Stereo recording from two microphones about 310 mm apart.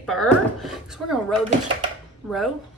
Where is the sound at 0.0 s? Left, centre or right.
Centre.